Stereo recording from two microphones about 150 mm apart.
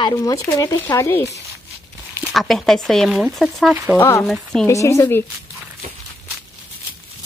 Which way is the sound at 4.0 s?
15° left (ahead or behind).